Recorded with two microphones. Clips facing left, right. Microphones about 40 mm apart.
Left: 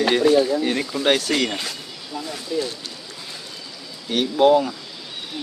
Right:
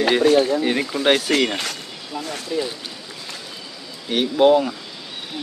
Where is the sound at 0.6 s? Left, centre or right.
Centre.